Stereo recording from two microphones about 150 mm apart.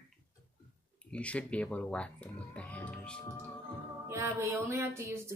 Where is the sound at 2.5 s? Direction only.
10° left (ahead or behind).